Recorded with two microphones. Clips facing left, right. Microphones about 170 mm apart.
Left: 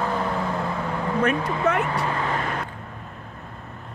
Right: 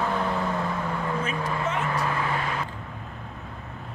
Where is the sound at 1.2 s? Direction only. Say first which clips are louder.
Left 6 dB; 65° left (ahead or behind).